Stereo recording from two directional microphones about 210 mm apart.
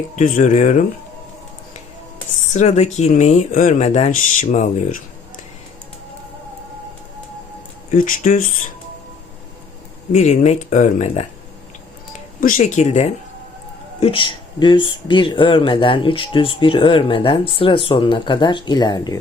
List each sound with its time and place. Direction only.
0.2 s speech: 35° left (ahead or behind)
2.5 s speech: 35° left (ahead or behind)
7.9 s speech: 40° left (ahead or behind)
10.1 s speech: 35° left (ahead or behind)
12.4 s speech: 40° left (ahead or behind); by 19.2 s 20° left (ahead or behind)